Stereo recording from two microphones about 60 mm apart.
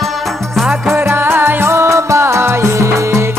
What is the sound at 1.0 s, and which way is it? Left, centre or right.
Music, right.